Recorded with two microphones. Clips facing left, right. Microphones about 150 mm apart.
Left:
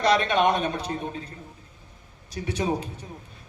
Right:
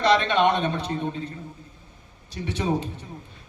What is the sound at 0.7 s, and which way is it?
Speech, 25° right (ahead or behind).